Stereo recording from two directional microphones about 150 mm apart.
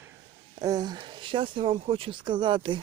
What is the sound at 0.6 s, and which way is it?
Speech, 25° right (ahead or behind).